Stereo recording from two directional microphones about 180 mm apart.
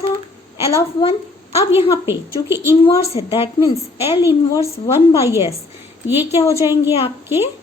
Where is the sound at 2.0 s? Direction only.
15° right (ahead or behind).